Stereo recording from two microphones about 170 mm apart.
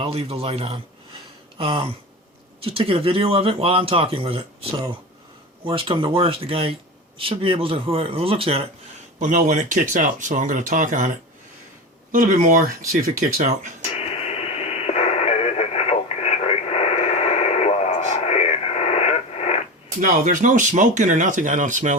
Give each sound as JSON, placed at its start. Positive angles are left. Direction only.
{"t": 0.0, "sound": "a sound", "side_deg": -35}
{"t": 2.6, "sound": "speech", "side_deg": -35}
{"t": 9.1, "sound": "speech", "side_deg": -50}
{"t": 12.1, "sound": "speech", "side_deg": -50}
{"t": 13.9, "sound": "radio", "side_deg": 35}
{"t": 20.0, "sound": "speech", "side_deg": -50}